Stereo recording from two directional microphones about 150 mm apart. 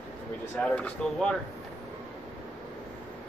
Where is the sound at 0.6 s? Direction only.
5° left (ahead or behind).